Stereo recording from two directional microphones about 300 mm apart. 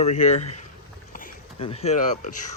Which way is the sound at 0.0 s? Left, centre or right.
Left.